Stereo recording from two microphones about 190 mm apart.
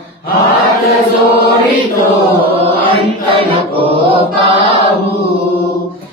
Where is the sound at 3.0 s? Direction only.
30° right (ahead or behind).